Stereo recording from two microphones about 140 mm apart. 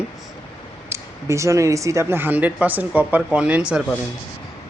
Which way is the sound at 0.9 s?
20° right (ahead or behind).